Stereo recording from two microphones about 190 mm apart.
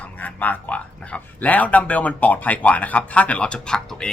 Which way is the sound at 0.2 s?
10° left (ahead or behind).